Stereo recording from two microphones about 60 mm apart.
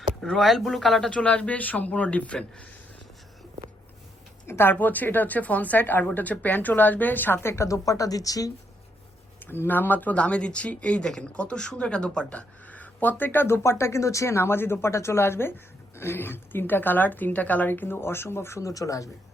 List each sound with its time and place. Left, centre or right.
0.4 s speech: centre
1.1 s speech: centre
4.4 s speech: left
7.4 s speech: left
9.4 s speech: left
17.7 s speech: left
18.6 s speech: left